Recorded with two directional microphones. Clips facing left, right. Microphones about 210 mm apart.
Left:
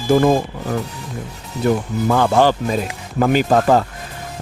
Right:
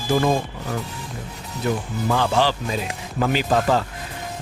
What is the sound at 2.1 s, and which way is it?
Speech, 50° left (ahead or behind).